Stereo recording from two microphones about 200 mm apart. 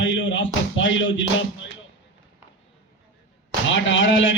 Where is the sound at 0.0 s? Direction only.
70° left (ahead or behind).